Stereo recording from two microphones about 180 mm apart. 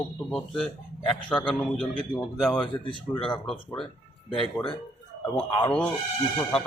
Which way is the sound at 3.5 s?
Centre (ahead or behind).